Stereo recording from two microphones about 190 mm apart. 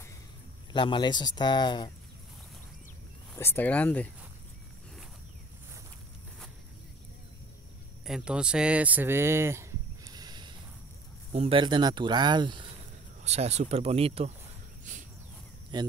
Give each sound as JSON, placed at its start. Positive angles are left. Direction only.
{"t": 0.7, "sound": "speech", "side_deg": 25}
{"t": 3.3, "sound": "speech", "side_deg": 10}
{"t": 8.0, "sound": "speech", "side_deg": -5}
{"t": 13.2, "sound": "speech", "side_deg": -35}
{"t": 14.9, "sound": "a sound", "side_deg": -40}
{"t": 15.7, "sound": "speech", "side_deg": -25}